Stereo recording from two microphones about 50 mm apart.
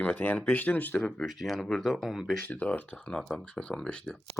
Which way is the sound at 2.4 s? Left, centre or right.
Left.